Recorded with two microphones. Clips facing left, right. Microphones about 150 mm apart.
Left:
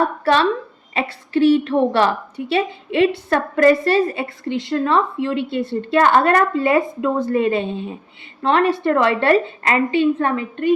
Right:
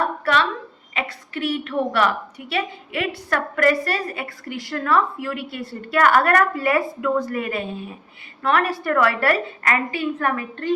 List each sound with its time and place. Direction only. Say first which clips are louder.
0.0 s a woman's voice: left 5 dB; 30° left (ahead or behind)